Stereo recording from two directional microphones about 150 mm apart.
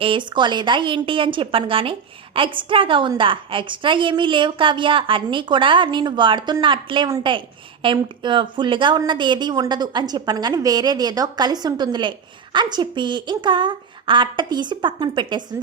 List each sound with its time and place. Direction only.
0.0 s a woman's voice: 35° right (ahead or behind)